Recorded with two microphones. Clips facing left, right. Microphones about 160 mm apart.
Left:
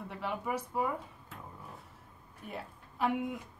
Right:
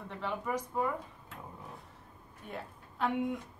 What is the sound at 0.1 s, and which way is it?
Speech, 10° left (ahead or behind).